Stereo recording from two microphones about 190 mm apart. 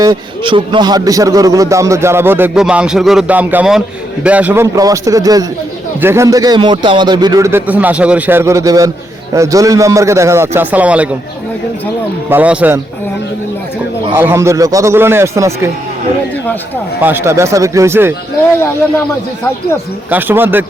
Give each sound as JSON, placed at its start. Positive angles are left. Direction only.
{"t": 0.0, "sound": "a man's voice", "side_deg": -25}
{"t": 12.3, "sound": "a man's voice", "side_deg": -5}
{"t": 14.2, "sound": "a man's voice", "side_deg": -15}
{"t": 17.0, "sound": "a man's voice", "side_deg": -10}
{"t": 20.1, "sound": "a man's voice", "side_deg": -10}